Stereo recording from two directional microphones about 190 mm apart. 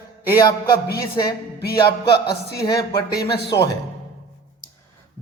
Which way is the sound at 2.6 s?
20° left (ahead or behind).